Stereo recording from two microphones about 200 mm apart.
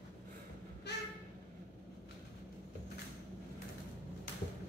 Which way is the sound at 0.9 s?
60° left (ahead or behind).